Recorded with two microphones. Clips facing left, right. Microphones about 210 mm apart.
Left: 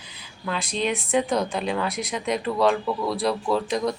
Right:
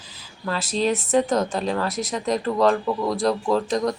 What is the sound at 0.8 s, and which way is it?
Speech, 40° right (ahead or behind).